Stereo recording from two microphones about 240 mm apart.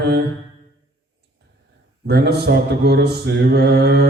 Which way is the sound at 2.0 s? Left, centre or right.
Right.